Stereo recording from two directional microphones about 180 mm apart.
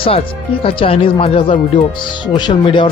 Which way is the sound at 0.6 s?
30° left (ahead or behind).